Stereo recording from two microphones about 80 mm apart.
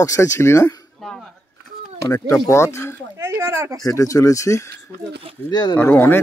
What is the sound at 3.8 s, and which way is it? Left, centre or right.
Speech, left.